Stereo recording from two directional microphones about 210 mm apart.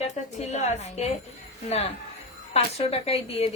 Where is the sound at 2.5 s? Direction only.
30° left (ahead or behind).